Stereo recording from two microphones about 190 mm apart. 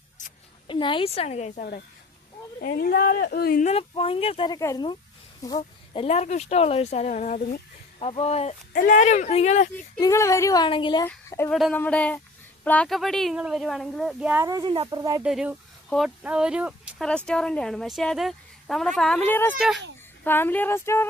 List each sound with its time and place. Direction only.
0.2 s a sound: 40° left (ahead or behind)
0.7 s speech: 25° left (ahead or behind)
2.6 s speech: 50° left (ahead or behind)
3.7 s speech: 30° left (ahead or behind)
5.5 s speech: 30° left (ahead or behind)
7.9 s speech: 30° left (ahead or behind)
8.7 s speech: 45° left (ahead or behind)
10.0 s speech: 15° left (ahead or behind)
11.0 s speech: 10° left (ahead or behind)
11.5 s a woman's voice: centre (ahead or behind); by 15.2 s 20° right (ahead or behind)
15.2 s a woman's voice: 5° right (ahead or behind)
19.5 s a woman's voice: 5° right (ahead or behind)
20.2 s speech: 10° left (ahead or behind)